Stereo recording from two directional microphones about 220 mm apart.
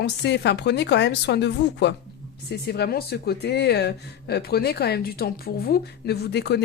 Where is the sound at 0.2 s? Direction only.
50° left (ahead or behind).